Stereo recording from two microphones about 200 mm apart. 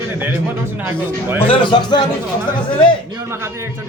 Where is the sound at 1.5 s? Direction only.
25° left (ahead or behind).